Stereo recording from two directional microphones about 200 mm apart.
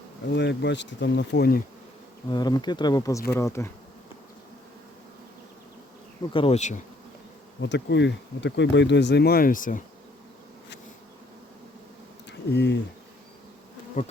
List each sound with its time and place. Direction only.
0.3 s speech: 60° left (ahead or behind)
2.3 s speech: 20° left (ahead or behind)
6.3 s bee: 30° left (ahead or behind)
7.6 s speech: 60° left (ahead or behind); by 9.8 s 40° left (ahead or behind)
12.5 s speech: 60° left (ahead or behind)
14.0 s bee: 35° left (ahead or behind)